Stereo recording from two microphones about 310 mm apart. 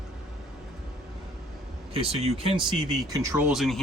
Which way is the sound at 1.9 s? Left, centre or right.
Centre.